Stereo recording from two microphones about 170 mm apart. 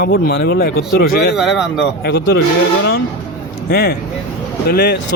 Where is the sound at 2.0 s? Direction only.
75° left (ahead or behind).